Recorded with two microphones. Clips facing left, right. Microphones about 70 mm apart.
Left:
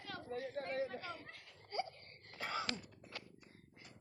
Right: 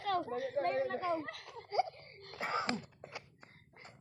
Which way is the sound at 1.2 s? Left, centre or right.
Right.